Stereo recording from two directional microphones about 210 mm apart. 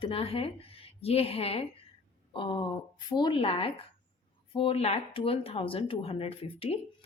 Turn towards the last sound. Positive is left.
turn(degrees=30)  # may be behind; listen again after turning